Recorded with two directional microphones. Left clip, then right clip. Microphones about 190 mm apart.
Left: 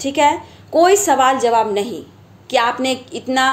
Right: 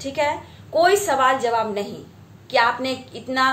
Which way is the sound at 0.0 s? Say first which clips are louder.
Left 8 dB; 45° left (ahead or behind).